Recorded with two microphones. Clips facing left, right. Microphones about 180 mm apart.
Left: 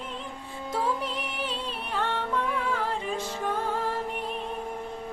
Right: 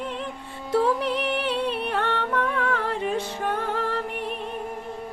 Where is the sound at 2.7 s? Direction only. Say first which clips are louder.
Right 4 dB; 65° right (ahead or behind).